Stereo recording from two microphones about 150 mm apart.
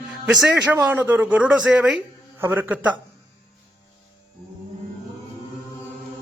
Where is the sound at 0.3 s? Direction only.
5° right (ahead or behind).